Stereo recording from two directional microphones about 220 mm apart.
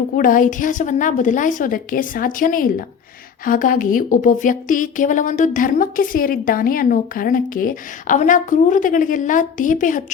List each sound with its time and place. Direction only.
0.2 s speech: 35° left (ahead or behind)